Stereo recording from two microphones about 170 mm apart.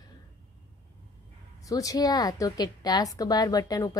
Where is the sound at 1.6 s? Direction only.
20° left (ahead or behind).